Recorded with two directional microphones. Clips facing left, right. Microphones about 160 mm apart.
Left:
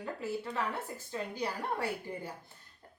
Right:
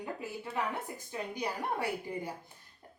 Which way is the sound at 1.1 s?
15° right (ahead or behind).